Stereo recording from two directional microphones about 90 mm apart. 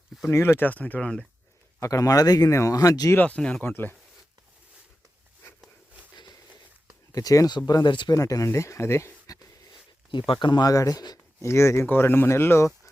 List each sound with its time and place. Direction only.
0.3 s speech: 25° left (ahead or behind); by 1.3 s 10° left (ahead or behind)
1.8 s speech: 40° left (ahead or behind)
3.2 s speech: 15° left (ahead or behind)
7.1 s speech: 40° left (ahead or behind)
10.1 s speech: 65° left (ahead or behind)
10.7 s speech: 40° left (ahead or behind)
11.4 s speech: 30° left (ahead or behind)